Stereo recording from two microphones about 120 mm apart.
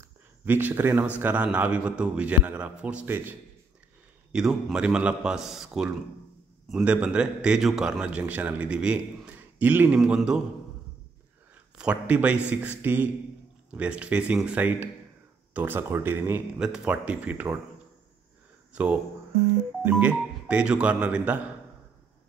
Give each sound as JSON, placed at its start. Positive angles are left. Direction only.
{"t": 0.5, "sound": "a man's voice", "side_deg": -15}
{"t": 4.3, "sound": "a man's voice", "side_deg": -5}
{"t": 11.8, "sound": "a man's voice", "side_deg": -10}
{"t": 16.5, "sound": "a man's voice", "side_deg": -5}
{"t": 18.7, "sound": "a man's voice", "side_deg": -10}